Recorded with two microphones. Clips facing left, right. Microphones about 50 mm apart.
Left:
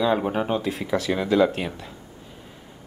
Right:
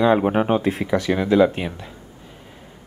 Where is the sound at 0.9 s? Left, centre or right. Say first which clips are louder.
Right 3 dB; centre.